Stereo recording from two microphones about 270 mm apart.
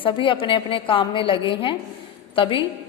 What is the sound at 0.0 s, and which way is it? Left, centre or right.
A woman's voice, centre.